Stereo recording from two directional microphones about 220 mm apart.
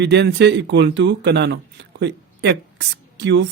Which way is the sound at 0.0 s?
50° right (ahead or behind).